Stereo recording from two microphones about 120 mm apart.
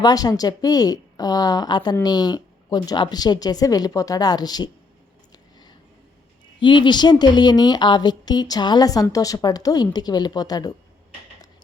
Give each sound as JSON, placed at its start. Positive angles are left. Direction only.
{"t": 0.0, "sound": "a woman's voice", "side_deg": 35}
{"t": 6.6, "sound": "a woman's voice", "side_deg": 40}